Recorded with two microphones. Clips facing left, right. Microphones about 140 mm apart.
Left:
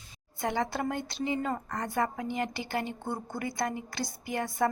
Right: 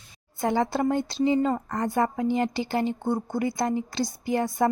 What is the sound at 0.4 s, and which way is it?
A woman's voice, 30° right (ahead or behind).